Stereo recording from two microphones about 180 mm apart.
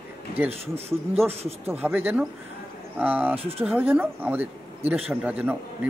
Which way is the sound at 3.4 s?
30° right (ahead or behind).